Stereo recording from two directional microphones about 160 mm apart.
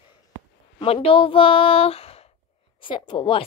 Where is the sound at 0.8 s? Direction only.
35° left (ahead or behind).